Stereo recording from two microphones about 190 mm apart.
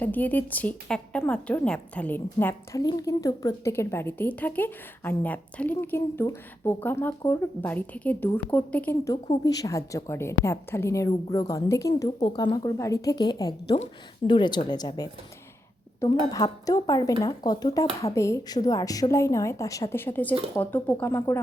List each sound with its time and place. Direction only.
0.0 s a woman's voice: 10° left (ahead or behind)
16.3 s a woman's voice: 20° left (ahead or behind)